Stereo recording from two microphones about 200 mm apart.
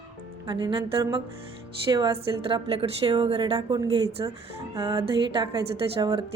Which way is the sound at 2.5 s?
25° right (ahead or behind).